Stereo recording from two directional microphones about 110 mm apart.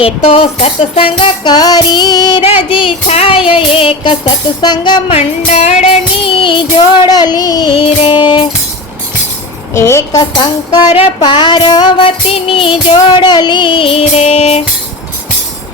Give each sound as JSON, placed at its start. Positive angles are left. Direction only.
{"t": 0.0, "sound": "music", "side_deg": 65}
{"t": 1.5, "sound": "music", "side_deg": 35}
{"t": 2.6, "sound": "music", "side_deg": 55}
{"t": 5.5, "sound": "music", "side_deg": 75}
{"t": 6.2, "sound": "music", "side_deg": 50}
{"t": 7.7, "sound": "music", "side_deg": 55}
{"t": 9.7, "sound": "a woman's voice", "side_deg": 25}
{"t": 10.7, "sound": "music", "side_deg": 45}
{"t": 12.0, "sound": "music", "side_deg": 55}